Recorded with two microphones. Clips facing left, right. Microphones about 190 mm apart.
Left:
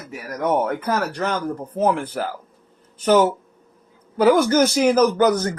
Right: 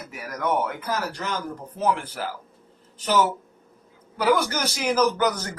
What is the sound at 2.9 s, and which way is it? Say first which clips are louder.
Speech: left 6 dB; 50° left (ahead or behind).